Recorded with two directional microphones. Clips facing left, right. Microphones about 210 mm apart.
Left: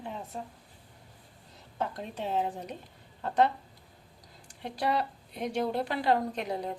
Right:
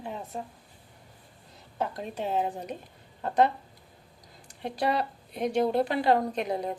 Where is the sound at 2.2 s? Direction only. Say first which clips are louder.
Right 2 dB; 10° right (ahead or behind).